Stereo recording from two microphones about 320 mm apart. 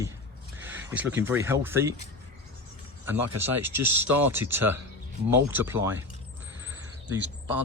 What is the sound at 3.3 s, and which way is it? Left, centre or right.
Speech, right.